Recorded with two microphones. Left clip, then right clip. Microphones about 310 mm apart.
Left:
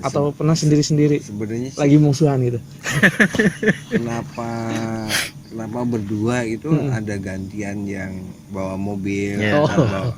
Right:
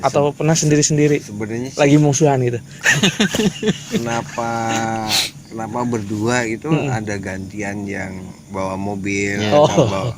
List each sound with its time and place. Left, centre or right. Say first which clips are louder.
0.0 s a man's voice: right 4 dB; right
1.4 s speech: right 1 dB; centre
1.7 s a man's voice: right 3 dB; right
3.0 s speech: left 2 dB; centre
4.1 s a man's voice: right 6 dB; right
5.9 s speech: right 2 dB; centre
6.7 s a man's voice: right 2 dB; right
6.9 s speech: right 3 dB; centre